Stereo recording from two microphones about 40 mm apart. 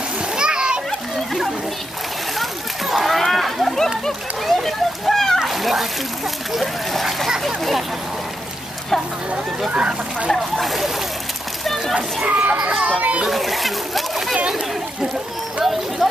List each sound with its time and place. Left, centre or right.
0.4 s splash: right
2.9 s a sound: centre
4.5 s splash: centre
5.4 s water: centre
6.5 s a sound: centre
9.7 s speech: right
10.3 s speech: centre
11.6 s a sound: centre
12.3 s a child's voice: right
12.8 s a child's voice: right
13.3 s speech: centre
15.6 s speech: centre